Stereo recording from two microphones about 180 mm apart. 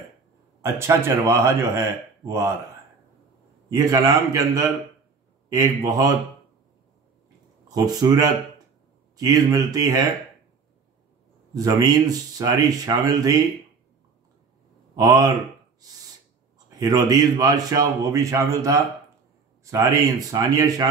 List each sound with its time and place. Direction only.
0.6 s speech: 15° right (ahead or behind)
3.7 s speech: 20° right (ahead or behind)
7.6 s speech: 20° right (ahead or behind)
11.5 s speech: 20° right (ahead or behind)
15.0 s speech: 20° right (ahead or behind)
16.5 s speech: 20° right (ahead or behind)